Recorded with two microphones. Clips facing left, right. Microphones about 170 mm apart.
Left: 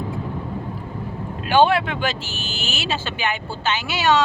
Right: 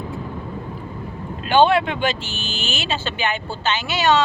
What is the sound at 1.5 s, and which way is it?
Speech, 10° left (ahead or behind).